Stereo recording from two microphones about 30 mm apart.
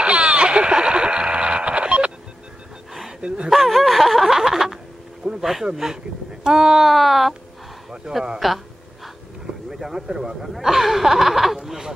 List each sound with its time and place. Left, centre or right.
0.0 s a sound: right
3.2 s a sound: right
3.4 s snicker: centre
5.4 s speech: centre
6.8 s speech: centre
8.1 s speech: centre
8.4 s speech: centre
9.7 s a sound: centre
10.1 s speech: right
10.6 s speech: centre